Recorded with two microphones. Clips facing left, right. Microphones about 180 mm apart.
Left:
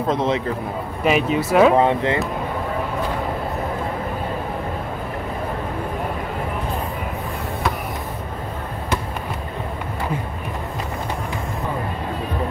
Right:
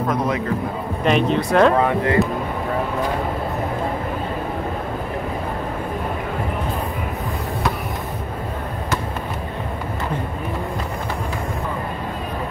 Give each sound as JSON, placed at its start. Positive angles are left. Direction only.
{"t": 0.1, "sound": "speech", "side_deg": 25}
{"t": 1.0, "sound": "speech", "side_deg": 5}
{"t": 1.8, "sound": "speech", "side_deg": 20}